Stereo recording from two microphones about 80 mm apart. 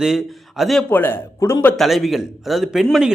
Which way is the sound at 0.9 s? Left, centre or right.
Left.